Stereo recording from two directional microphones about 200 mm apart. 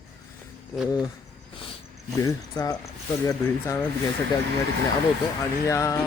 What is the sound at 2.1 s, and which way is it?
Speech, 15° left (ahead or behind).